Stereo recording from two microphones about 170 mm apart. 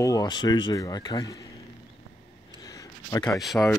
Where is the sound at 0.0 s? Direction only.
20° left (ahead or behind).